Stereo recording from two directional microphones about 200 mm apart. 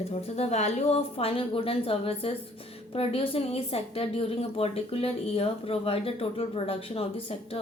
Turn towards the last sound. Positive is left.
turn(degrees=30)  # may be behind; listen again after turning